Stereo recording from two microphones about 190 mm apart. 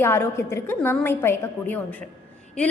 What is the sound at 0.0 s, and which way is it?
A woman's voice, 15° left (ahead or behind).